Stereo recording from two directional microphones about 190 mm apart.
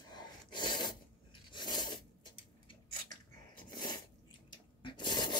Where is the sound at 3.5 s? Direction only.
25° left (ahead or behind).